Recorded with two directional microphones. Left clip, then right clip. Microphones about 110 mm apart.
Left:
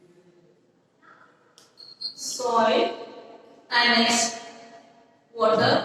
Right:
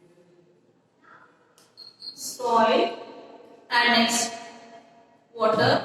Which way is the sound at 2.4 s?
35° left (ahead or behind).